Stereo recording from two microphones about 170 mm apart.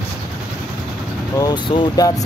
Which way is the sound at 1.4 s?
25° left (ahead or behind).